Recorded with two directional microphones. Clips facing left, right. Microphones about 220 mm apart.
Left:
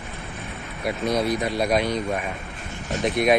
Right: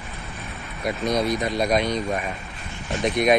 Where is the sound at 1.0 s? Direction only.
15° right (ahead or behind).